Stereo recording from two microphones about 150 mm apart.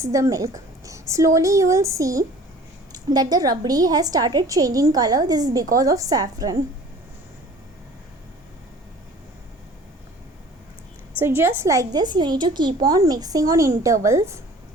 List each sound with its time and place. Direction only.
0.0 s a woman's voice: 20° right (ahead or behind)
11.2 s a woman's voice: 15° right (ahead or behind)